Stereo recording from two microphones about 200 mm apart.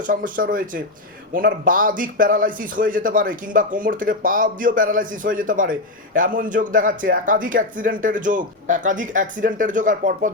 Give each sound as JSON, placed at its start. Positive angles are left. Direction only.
{"t": 0.1, "sound": "a man's voice", "side_deg": -45}